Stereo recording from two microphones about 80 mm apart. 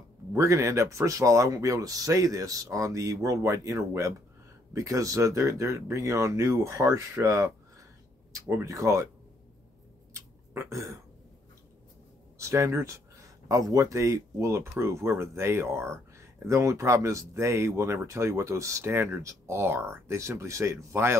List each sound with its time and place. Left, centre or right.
0.3 s speech: right
8.6 s speech: right
10.1 s a sound: right
12.4 s speech: right